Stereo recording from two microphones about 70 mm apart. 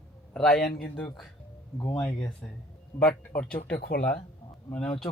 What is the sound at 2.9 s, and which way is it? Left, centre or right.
Speech, left.